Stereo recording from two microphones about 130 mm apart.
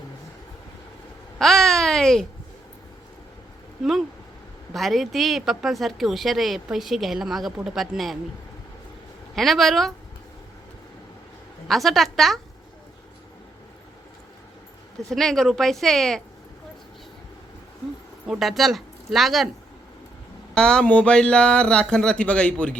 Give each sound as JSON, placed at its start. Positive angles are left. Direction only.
{"t": 1.4, "sound": "babbling", "side_deg": 0}
{"t": 4.7, "sound": "speech", "side_deg": 0}
{"t": 9.3, "sound": "speech", "side_deg": 0}
{"t": 11.7, "sound": "speech", "side_deg": 0}
{"t": 15.1, "sound": "speech", "side_deg": 5}
{"t": 18.3, "sound": "speech", "side_deg": 0}
{"t": 20.5, "sound": "speech", "side_deg": 5}